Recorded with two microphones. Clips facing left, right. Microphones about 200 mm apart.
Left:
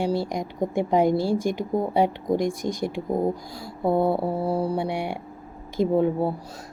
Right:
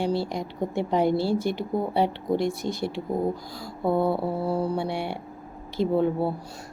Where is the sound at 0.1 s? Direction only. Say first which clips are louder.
Left 1 dB; 45° left (ahead or behind).